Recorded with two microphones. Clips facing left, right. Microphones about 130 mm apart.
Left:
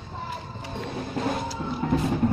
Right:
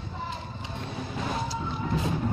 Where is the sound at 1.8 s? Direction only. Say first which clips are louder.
Left 7 dB; 55° left (ahead or behind).